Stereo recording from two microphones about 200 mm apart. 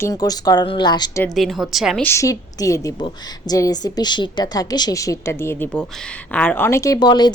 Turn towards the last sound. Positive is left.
turn(degrees=20)  # may be behind; listen again after turning